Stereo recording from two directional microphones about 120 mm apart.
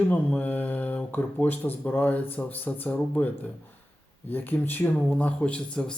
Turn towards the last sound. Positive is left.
turn(degrees=10)  # may be behind; listen again after turning